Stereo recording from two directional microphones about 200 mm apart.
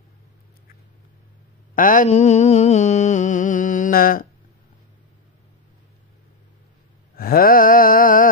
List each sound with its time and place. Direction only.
1.8 s mantra: 40° left (ahead or behind)
7.2 s wail: 45° left (ahead or behind)